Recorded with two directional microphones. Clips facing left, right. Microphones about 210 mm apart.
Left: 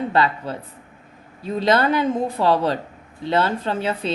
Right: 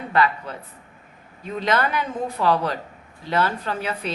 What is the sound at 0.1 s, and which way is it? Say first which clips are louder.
Speech: left 1 dB; 30° left (ahead or behind).